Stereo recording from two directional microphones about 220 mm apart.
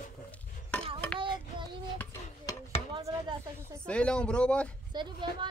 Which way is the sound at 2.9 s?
15° right (ahead or behind).